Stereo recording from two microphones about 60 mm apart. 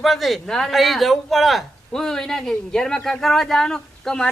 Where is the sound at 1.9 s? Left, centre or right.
Centre.